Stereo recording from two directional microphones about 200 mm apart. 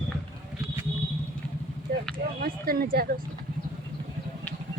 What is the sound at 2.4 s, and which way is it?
Speech, 45° right (ahead or behind).